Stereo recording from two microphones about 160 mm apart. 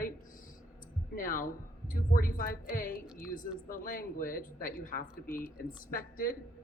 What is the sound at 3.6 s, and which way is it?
Speech, 60° left (ahead or behind).